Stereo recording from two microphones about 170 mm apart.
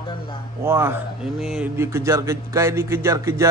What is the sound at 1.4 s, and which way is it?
Speech, 5° right (ahead or behind).